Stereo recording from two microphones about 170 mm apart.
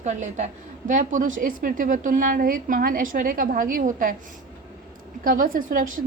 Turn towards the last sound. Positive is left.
turn(degrees=-55)  # may be behind; listen again after turning